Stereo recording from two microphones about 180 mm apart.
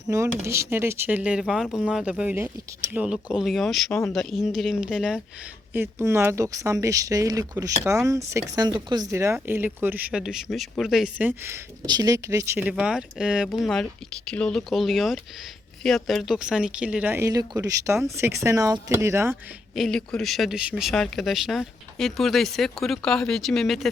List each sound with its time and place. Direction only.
0.1 s speech: 15° right (ahead or behind)
19.7 s speech: centre (ahead or behind)